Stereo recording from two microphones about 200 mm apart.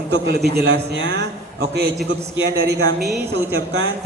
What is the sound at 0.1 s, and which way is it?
A man's voice, 55° right (ahead or behind).